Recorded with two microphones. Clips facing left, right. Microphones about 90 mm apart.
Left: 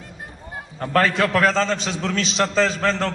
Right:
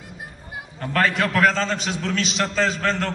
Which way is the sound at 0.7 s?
35° left (ahead or behind).